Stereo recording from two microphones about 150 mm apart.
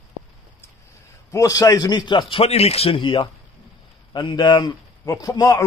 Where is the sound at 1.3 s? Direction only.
25° left (ahead or behind).